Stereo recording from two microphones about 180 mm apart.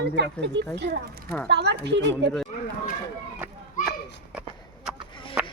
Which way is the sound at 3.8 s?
45° left (ahead or behind).